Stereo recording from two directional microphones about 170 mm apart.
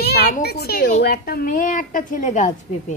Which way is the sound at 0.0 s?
70° left (ahead or behind).